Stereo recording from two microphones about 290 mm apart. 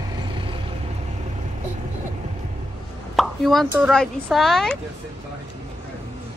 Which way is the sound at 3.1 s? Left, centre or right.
Centre.